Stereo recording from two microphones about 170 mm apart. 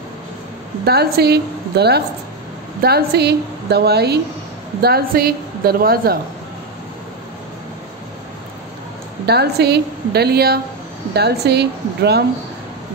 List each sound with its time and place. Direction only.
0.8 s a woman's voice: 70° right (ahead or behind)
9.2 s a woman's voice: 70° right (ahead or behind)